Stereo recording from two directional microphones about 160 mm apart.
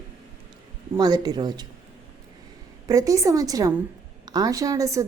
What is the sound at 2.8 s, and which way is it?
Speech, 20° right (ahead or behind).